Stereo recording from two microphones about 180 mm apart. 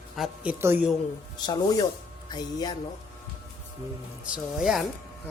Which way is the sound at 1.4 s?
25° left (ahead or behind).